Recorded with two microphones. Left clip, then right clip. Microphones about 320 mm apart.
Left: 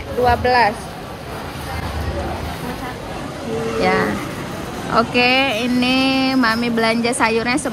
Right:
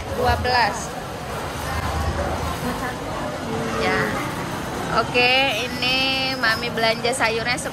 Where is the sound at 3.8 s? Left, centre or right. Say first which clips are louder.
Left 5 dB; centre.